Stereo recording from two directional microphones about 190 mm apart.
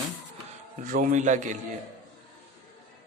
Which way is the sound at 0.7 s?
45° right (ahead or behind).